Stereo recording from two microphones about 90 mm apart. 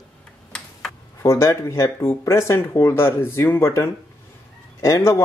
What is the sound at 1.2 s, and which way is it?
Speech, 30° left (ahead or behind).